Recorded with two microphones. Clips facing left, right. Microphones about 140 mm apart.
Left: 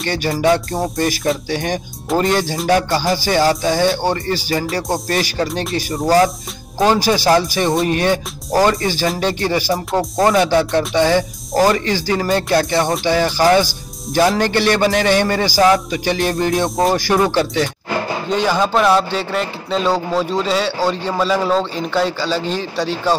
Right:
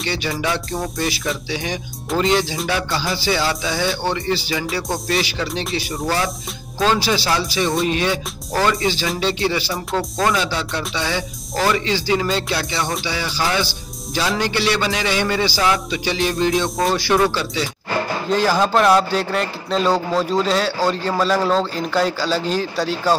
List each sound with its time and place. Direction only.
0.0 s a man's voice: 45° left (ahead or behind)
6.0 s music: 40° left (ahead or behind)
7.2 s a man's voice: 45° left (ahead or behind)
9.9 s speech: 25° left (ahead or behind)
10.3 s a man's voice: 50° left (ahead or behind)
18.3 s a man's voice: centre (ahead or behind)